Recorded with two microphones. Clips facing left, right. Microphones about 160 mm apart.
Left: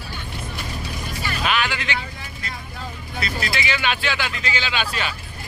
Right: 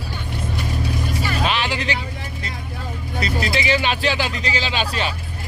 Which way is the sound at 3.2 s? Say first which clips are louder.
Right 4 dB; 35° right (ahead or behind).